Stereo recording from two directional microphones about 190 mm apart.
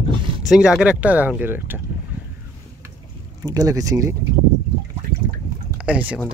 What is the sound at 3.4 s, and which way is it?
Speech, 20° right (ahead or behind).